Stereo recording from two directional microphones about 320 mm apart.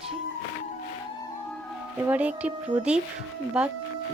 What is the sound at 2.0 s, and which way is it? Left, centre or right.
Speech, centre.